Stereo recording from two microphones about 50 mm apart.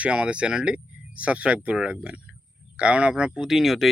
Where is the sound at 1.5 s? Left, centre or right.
Centre.